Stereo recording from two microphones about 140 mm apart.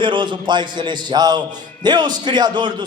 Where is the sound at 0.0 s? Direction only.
35° right (ahead or behind).